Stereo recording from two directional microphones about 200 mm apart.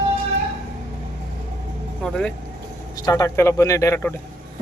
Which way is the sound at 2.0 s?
5° left (ahead or behind).